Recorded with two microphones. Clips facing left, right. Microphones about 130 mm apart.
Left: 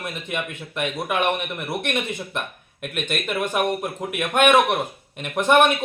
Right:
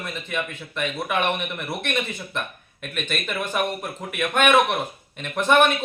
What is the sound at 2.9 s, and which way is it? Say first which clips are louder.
Speech: left 3 dB; 15° left (ahead or behind).